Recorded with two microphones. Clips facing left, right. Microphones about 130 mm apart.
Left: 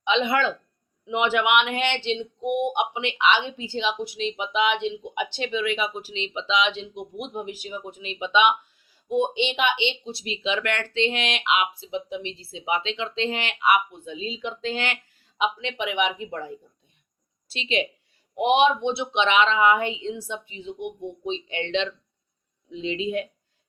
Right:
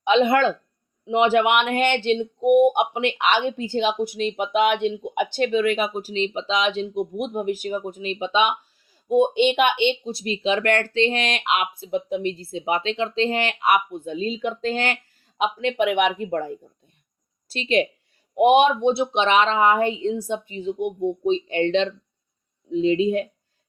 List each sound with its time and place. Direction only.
0.0 s speech: 45° right (ahead or behind)